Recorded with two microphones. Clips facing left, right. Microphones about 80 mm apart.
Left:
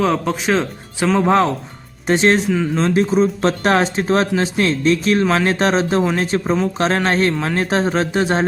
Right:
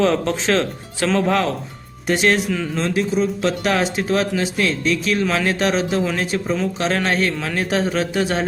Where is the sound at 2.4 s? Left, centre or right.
Centre.